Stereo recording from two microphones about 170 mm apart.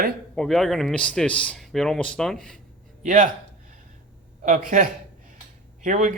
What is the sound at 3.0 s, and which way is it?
Speech, 50° right (ahead or behind).